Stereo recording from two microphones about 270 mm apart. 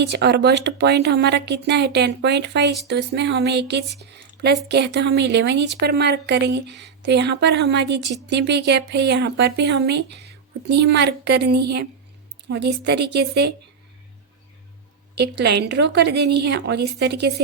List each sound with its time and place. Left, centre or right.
0.0 s speech: right
15.1 s speech: right